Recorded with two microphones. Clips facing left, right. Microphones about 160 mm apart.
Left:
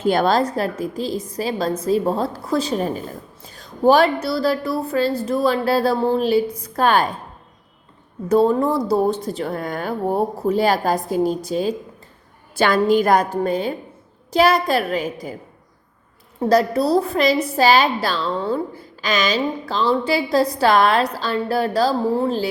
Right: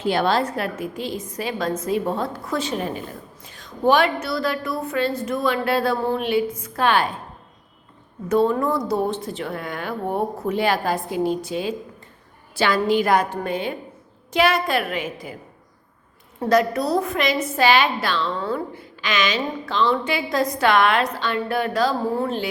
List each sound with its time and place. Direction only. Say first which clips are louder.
0.0 s a woman's voice: left 3 dB; 45° left (ahead or behind)
8.3 s a woman's voice: left 3 dB; 35° left (ahead or behind)
16.4 s a woman's voice: left 2 dB; 30° left (ahead or behind)